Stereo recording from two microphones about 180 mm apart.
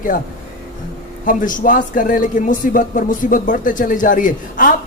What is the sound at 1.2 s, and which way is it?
Speech, 45° left (ahead or behind).